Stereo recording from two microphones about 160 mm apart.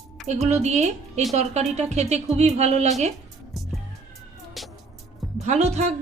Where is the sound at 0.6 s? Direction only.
45° right (ahead or behind).